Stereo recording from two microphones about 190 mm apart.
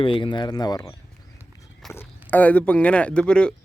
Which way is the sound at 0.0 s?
25° left (ahead or behind).